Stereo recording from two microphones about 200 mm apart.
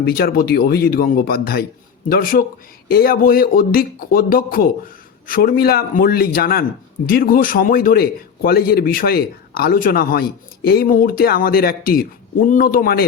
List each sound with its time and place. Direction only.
0.0 s speech: 50° left (ahead or behind)